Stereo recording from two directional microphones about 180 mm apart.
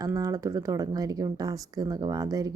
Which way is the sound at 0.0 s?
20° right (ahead or behind).